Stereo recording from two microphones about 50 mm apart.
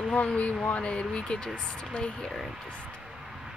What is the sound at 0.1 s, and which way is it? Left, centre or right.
A woman's voice, centre.